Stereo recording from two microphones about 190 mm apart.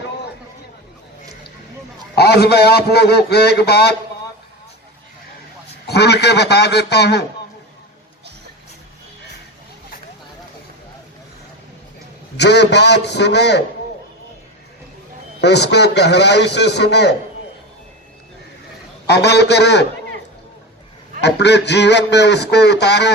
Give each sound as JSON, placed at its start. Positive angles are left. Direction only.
{"t": 2.1, "sound": "a man's voice", "side_deg": 60}
{"t": 5.9, "sound": "a man's voice", "side_deg": 60}
{"t": 12.4, "sound": "a man's voice", "side_deg": 65}
{"t": 15.4, "sound": "a man's voice", "side_deg": 60}
{"t": 19.0, "sound": "a man's voice", "side_deg": 60}
{"t": 21.2, "sound": "a man's voice", "side_deg": 65}